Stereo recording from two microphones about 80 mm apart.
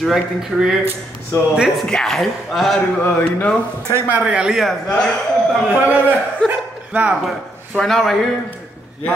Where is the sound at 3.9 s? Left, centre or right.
Right.